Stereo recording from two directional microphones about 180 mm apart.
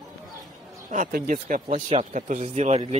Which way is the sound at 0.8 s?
45° right (ahead or behind).